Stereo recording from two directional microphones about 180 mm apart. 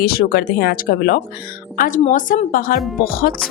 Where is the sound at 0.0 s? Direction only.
60° left (ahead or behind).